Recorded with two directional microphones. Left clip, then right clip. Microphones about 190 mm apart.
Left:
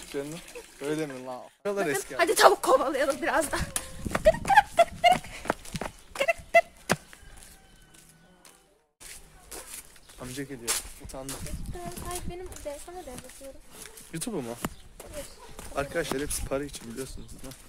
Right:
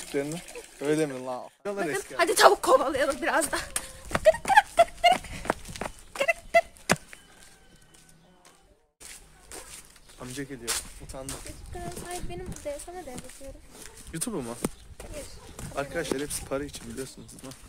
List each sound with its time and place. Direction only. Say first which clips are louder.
0.1 s speech: right 4 dB; 70° right (ahead or behind)
1.1 s speech: right 4 dB; 40° right (ahead or behind)
1.6 s speech: left 4 dB; 60° left (ahead or behind)
2.1 s speech: right 1 dB; 5° right (ahead or behind)
4.5 s a sound: even; 10° right (ahead or behind)
5.5 s a sound: right 1 dB; 25° right (ahead or behind)
6.1 s a sound: left 1 dB; centre (ahead or behind)
6.9 s chop: right 2 dB; 30° right (ahead or behind)
9.0 s a sound: even; centre (ahead or behind)
10.6 s speech: left 1 dB; 10° left (ahead or behind)
12.7 s speech: right 3 dB; 20° right (ahead or behind)
14.2 s speech: even; 10° right (ahead or behind)
15.7 s speech: left 1 dB; 10° left (ahead or behind)